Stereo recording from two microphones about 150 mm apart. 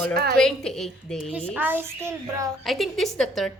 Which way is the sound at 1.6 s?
15° right (ahead or behind).